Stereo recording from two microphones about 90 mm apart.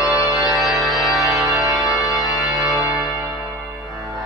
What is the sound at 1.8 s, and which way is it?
Organ, 40° left (ahead or behind).